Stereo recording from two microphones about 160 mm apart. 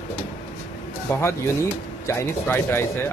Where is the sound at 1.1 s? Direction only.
15° left (ahead or behind).